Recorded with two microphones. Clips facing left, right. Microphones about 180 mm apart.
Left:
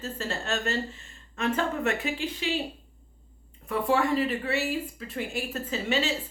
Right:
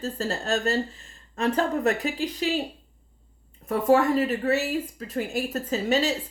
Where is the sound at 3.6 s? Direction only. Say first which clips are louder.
Right 5 dB; 40° right (ahead or behind).